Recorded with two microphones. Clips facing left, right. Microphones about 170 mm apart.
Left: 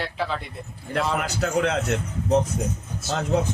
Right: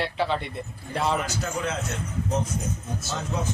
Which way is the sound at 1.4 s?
65° left (ahead or behind).